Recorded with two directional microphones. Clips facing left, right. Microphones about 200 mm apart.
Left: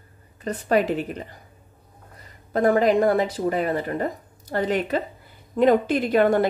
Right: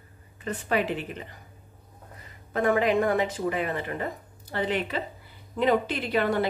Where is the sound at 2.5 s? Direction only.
40° left (ahead or behind).